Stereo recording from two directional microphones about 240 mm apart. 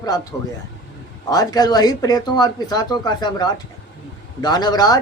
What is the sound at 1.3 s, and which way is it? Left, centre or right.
Speech, centre.